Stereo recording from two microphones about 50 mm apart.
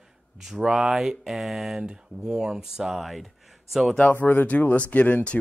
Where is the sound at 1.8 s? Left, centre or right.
Centre.